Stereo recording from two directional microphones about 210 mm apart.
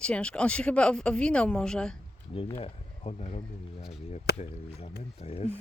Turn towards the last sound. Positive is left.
turn(degrees=30)  # may be behind; listen again after turning